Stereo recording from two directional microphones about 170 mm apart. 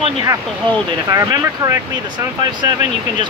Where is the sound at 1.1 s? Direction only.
15° right (ahead or behind).